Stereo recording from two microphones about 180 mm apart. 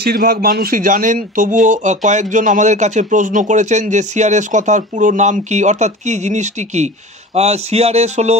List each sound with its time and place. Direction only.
0.0 s speech: 55° right (ahead or behind); by 8.4 s 35° right (ahead or behind)